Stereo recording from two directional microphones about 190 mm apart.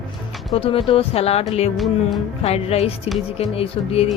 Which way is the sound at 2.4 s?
35° left (ahead or behind).